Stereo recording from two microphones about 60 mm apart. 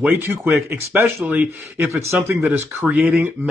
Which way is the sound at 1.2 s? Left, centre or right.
Right.